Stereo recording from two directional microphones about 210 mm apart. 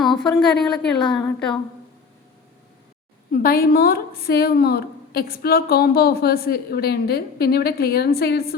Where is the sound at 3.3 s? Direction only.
45° left (ahead or behind).